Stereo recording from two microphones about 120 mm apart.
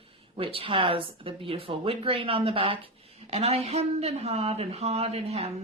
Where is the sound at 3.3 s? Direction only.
60° right (ahead or behind).